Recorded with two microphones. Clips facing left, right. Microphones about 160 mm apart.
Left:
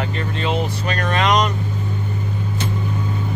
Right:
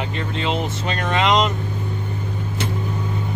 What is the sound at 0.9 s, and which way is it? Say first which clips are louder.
Speech: even; 20° right (ahead or behind).